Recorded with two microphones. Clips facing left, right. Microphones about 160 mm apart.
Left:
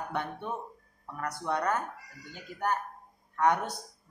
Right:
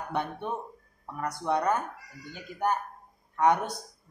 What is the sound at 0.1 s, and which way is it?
Speech, 20° right (ahead or behind).